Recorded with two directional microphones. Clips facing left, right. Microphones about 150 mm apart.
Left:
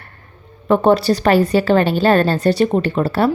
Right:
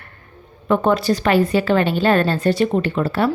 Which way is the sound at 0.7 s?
35° left (ahead or behind).